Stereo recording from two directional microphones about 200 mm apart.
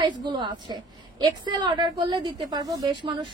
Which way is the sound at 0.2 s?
20° right (ahead or behind).